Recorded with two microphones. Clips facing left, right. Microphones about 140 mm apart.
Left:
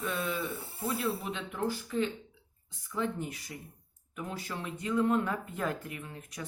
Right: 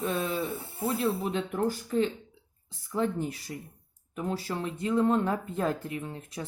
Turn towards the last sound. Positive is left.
turn(degrees=-30)  # may be behind; listen again after turning